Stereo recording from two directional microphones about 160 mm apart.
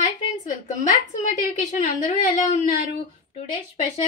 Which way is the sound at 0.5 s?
50° left (ahead or behind).